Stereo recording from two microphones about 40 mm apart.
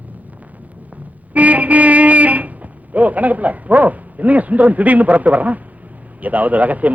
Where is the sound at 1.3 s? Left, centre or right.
Right.